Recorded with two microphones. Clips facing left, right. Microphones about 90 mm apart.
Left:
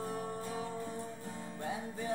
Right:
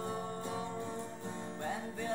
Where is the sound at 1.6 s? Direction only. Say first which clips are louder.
Even; 5° left (ahead or behind).